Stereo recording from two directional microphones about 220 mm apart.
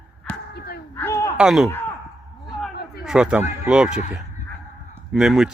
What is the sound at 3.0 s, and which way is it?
Speech, 5° right (ahead or behind).